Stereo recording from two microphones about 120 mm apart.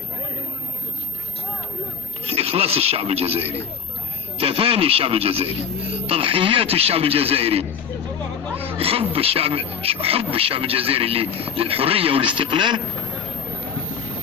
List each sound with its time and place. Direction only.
2.2 s a man's voice: 55° right (ahead or behind)